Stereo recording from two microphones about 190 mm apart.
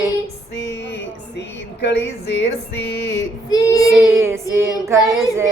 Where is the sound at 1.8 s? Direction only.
65° left (ahead or behind).